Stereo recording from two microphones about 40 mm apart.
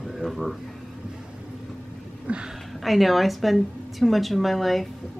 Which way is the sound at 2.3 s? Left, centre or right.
Right.